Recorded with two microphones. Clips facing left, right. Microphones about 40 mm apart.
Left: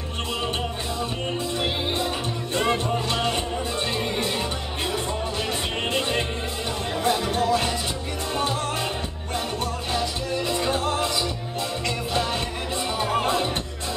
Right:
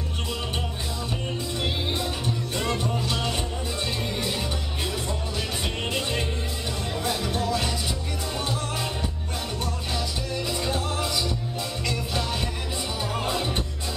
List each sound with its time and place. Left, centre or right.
2.5 s music: left
5.9 s music: centre
9.9 s music: centre
12.1 s music: centre